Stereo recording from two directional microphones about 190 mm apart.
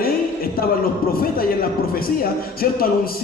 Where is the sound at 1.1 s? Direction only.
50° left (ahead or behind).